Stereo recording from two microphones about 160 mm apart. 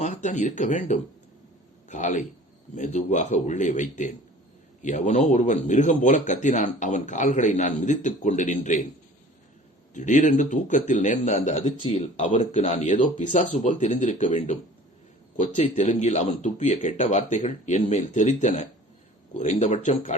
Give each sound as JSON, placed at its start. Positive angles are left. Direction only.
{"t": 0.0, "sound": "speech", "side_deg": 50}
{"t": 9.9, "sound": "speech", "side_deg": 50}